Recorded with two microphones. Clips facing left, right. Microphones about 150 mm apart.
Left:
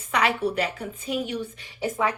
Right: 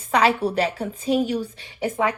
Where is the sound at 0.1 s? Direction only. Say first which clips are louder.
Right 4 dB; 30° right (ahead or behind).